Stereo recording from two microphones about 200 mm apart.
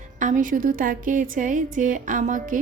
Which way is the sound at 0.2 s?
40° right (ahead or behind).